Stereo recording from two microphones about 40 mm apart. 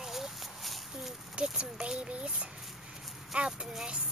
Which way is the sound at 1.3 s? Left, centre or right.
Right.